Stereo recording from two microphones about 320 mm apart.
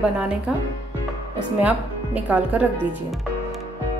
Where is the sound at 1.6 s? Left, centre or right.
Centre.